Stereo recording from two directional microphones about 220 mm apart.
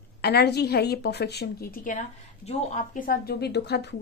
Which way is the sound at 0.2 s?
45° left (ahead or behind).